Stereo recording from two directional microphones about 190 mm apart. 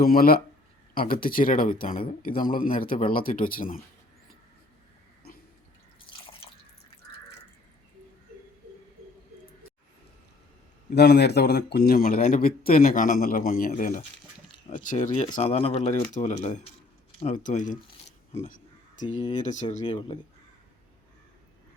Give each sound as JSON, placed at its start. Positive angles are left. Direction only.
{"t": 0.0, "sound": "a man's voice", "side_deg": 50}
{"t": 10.9, "sound": "a man's voice", "side_deg": 60}
{"t": 18.4, "sound": "a sound", "side_deg": 45}
{"t": 19.8, "sound": "speech", "side_deg": 25}